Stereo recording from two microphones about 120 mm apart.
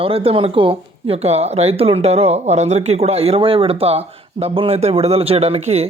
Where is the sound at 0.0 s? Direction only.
50° right (ahead or behind).